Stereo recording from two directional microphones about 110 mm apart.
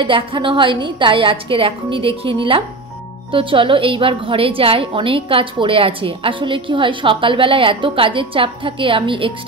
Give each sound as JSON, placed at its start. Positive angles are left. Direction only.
{"t": 0.0, "sound": "a woman's voice", "side_deg": -50}